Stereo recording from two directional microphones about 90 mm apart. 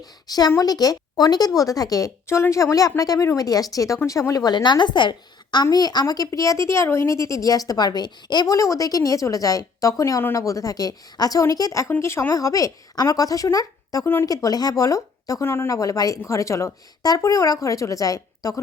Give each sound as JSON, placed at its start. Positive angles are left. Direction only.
{"t": 0.0, "sound": "a woman's voice", "side_deg": 50}
{"t": 4.5, "sound": "a woman's voice", "side_deg": 55}
{"t": 11.9, "sound": "speech", "side_deg": 30}
{"t": 14.0, "sound": "speech", "side_deg": 25}
{"t": 14.3, "sound": "speech", "side_deg": 45}
{"t": 15.7, "sound": "speech", "side_deg": 40}